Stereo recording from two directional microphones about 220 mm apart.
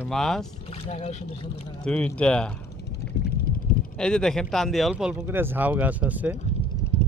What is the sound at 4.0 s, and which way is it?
Speech, 5° left (ahead or behind).